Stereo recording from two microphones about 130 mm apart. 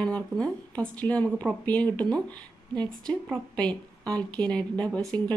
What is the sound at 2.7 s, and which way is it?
Speech, 35° right (ahead or behind).